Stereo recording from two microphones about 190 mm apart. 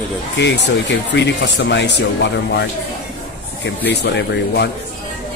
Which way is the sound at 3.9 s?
65° left (ahead or behind).